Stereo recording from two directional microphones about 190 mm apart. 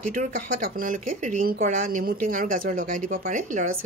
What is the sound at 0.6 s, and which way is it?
Speech, 50° right (ahead or behind).